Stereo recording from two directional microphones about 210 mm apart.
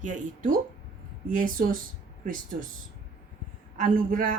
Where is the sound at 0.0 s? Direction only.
40° right (ahead or behind).